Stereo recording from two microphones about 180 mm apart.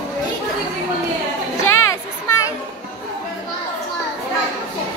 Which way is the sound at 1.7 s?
15° left (ahead or behind).